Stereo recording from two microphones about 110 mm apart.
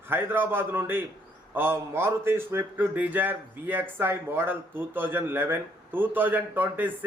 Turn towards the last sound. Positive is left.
turn(degrees=-15)  # may be behind; listen again after turning